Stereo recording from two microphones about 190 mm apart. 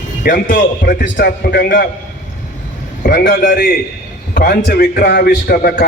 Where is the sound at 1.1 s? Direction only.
55° left (ahead or behind).